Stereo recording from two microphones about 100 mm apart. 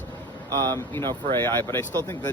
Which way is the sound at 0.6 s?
25° left (ahead or behind).